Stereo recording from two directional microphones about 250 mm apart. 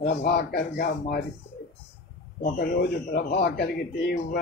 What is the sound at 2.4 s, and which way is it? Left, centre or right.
A man's voice, left.